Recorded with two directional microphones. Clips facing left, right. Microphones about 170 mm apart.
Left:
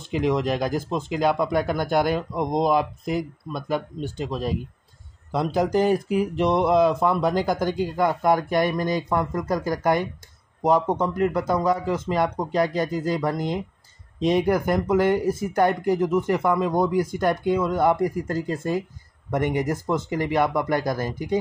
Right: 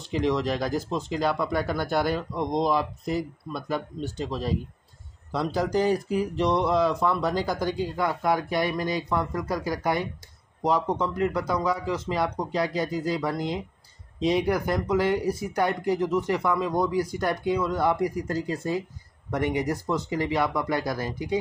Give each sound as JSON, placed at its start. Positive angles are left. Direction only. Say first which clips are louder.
{"t": 0.1, "sound": "speech", "louder": "left 2 dB", "side_deg": 55}
{"t": 1.7, "sound": "speech", "louder": "left 3 dB", "side_deg": 15}
{"t": 2.3, "sound": "speech", "louder": "left 3 dB", "side_deg": 50}
{"t": 5.3, "sound": "a man's voice", "louder": "left 3 dB", "side_deg": 50}